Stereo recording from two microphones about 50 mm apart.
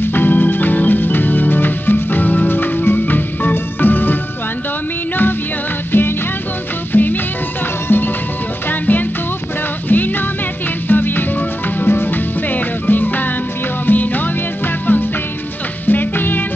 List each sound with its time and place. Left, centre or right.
0.0 s music: left
5.9 s music: left
8.6 s music: left